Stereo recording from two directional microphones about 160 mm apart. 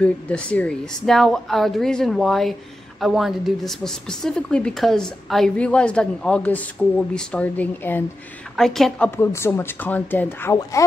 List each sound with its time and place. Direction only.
0.0 s a woman's voice: 5° left (ahead or behind)
9.1 s speech: 15° left (ahead or behind)